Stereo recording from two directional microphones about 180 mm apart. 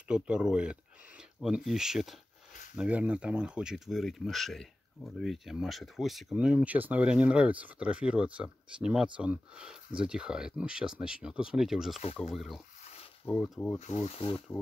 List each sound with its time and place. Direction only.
0.1 s speech: 5° right (ahead or behind)
13.7 s speech: 40° left (ahead or behind)